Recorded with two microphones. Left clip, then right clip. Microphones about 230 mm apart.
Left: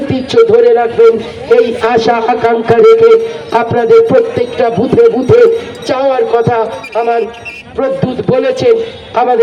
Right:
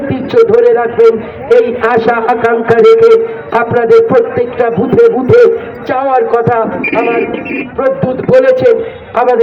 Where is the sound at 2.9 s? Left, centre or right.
Left.